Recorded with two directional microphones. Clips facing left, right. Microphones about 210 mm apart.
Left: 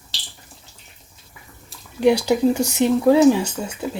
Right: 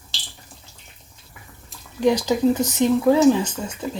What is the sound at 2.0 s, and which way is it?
Speech, 10° left (ahead or behind).